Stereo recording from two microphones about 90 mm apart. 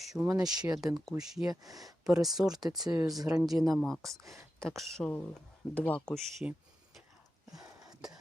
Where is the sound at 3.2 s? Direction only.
40° right (ahead or behind).